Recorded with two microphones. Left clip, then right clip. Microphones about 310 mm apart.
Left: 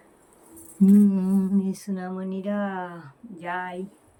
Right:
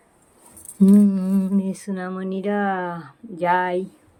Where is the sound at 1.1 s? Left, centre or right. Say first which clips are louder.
Right 2 dB; centre.